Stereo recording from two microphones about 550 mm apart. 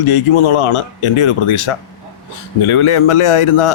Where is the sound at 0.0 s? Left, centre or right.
Left.